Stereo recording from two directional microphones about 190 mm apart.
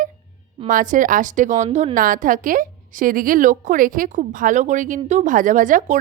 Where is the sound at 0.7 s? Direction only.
45° right (ahead or behind).